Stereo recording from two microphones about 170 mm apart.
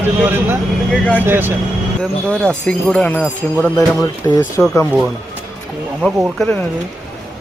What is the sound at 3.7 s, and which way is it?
Speech, 20° left (ahead or behind).